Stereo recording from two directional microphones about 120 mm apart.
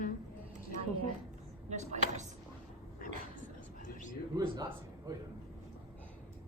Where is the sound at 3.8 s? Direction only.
90° left.